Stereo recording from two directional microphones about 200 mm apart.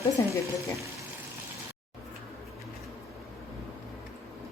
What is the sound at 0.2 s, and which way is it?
Speech, 15° left (ahead or behind).